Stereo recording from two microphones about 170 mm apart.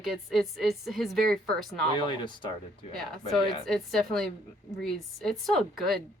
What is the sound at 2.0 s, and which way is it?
Speech, 25° left (ahead or behind).